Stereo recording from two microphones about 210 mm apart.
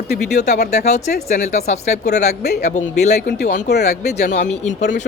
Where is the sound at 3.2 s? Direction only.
50° left (ahead or behind).